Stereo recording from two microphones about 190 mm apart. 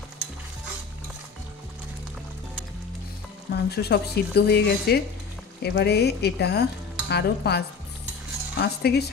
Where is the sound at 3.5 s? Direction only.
60° left (ahead or behind).